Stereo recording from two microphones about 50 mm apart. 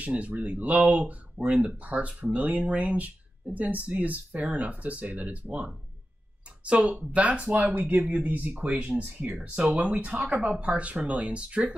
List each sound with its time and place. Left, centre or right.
0.0 s speech: right